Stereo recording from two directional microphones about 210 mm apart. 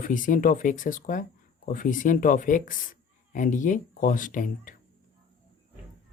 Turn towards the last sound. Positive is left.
turn(degrees=40)  # may be behind; listen again after turning